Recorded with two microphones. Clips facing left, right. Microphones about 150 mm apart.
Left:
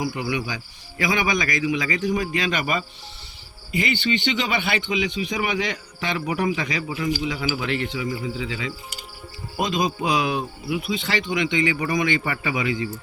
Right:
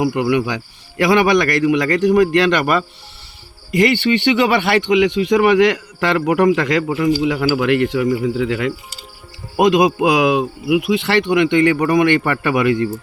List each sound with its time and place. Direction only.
0.0 s speech: 65° right (ahead or behind)